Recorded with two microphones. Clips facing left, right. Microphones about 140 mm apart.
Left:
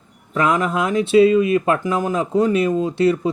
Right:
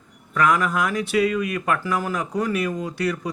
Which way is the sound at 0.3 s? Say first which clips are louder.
Left 2 dB; 25° left (ahead or behind).